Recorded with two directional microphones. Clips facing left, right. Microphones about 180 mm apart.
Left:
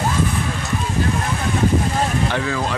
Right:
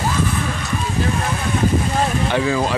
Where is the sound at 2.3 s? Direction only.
15° right (ahead or behind).